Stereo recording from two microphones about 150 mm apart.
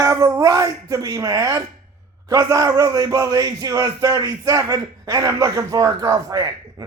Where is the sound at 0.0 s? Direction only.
20° right (ahead or behind).